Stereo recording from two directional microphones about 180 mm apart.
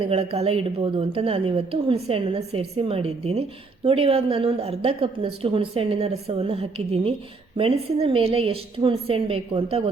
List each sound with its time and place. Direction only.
0.1 s a woman's voice: 35° right (ahead or behind)